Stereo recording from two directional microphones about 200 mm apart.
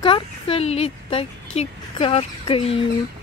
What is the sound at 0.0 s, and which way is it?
A woman's voice, 25° left (ahead or behind).